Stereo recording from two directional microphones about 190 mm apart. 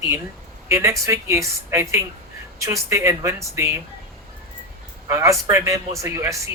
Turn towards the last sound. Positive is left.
turn(degrees=-15)  # may be behind; listen again after turning